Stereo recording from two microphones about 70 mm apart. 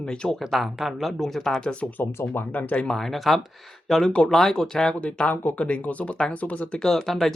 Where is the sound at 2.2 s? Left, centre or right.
Left.